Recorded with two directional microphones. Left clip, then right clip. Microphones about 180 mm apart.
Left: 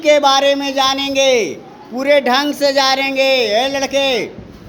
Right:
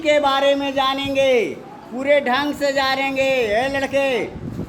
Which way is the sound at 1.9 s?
25° left (ahead or behind).